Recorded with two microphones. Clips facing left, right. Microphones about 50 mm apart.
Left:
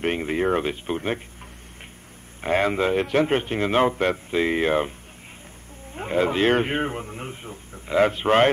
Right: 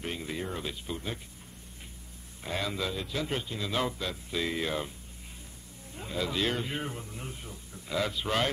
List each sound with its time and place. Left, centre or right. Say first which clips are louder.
0.0 s a man's voice: left 12 dB; left
2.4 s a man's voice: left 12 dB; left
5.9 s a man's voice: left 10 dB; left